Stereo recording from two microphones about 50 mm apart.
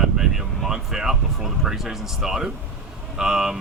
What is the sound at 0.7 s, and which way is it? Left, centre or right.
Speech, centre.